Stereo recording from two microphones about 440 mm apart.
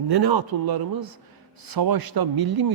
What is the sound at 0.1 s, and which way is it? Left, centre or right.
A man's voice, right.